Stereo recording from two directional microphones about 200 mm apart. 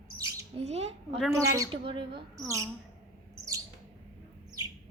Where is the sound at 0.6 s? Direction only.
30° right (ahead or behind).